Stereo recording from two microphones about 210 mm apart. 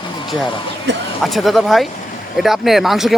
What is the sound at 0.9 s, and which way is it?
Speech, 55° right (ahead or behind).